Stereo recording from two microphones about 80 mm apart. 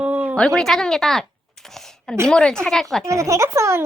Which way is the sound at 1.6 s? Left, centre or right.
Centre.